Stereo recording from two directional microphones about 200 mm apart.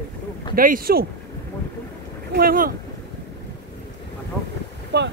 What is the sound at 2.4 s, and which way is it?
Speech, 45° right (ahead or behind).